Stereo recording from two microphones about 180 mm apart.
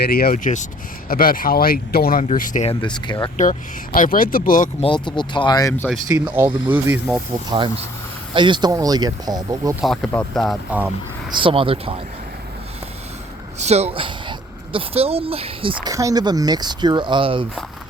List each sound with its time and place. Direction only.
0.0 s speech: 60° left (ahead or behind)
2.8 s speech: 25° left (ahead or behind)
3.3 s speech: 45° left (ahead or behind)
4.8 s speech: 25° left (ahead or behind)
6.2 s speech: 10° right (ahead or behind)
8.3 s a woman's voice: 25° right (ahead or behind)
9.8 s speech: centre (ahead or behind)
11.3 s a woman's voice: 30° right (ahead or behind)
13.6 s a woman's voice: 35° right (ahead or behind)